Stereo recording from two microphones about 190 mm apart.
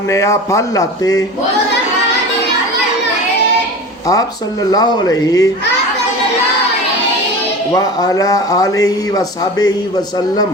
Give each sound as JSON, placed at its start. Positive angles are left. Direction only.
{"t": 0.1, "sound": "speech", "side_deg": 15}
{"t": 4.0, "sound": "speech", "side_deg": 20}
{"t": 7.7, "sound": "speech", "side_deg": 20}